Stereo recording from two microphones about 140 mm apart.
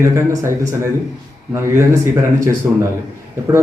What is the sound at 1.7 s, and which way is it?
Speech, 20° right (ahead or behind).